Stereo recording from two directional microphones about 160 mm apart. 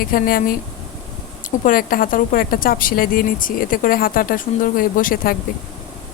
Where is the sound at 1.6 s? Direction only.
60° left (ahead or behind).